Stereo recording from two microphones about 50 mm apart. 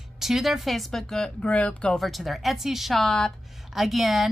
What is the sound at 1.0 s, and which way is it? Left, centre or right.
Speech, centre.